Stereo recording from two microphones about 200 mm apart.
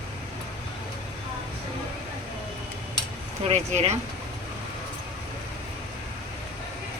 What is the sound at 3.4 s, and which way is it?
Speech, 30° right (ahead or behind).